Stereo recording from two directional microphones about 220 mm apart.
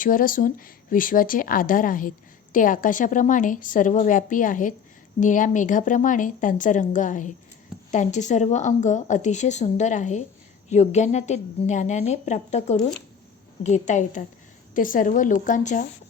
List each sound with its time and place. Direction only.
0.0 s speech: 40° left (ahead or behind)